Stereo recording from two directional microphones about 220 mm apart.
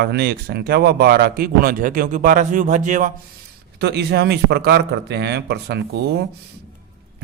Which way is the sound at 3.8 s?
50° right (ahead or behind).